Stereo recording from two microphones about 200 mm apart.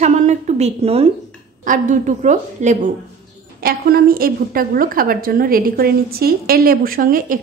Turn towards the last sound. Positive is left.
turn(degrees=-45)  # may be behind; listen again after turning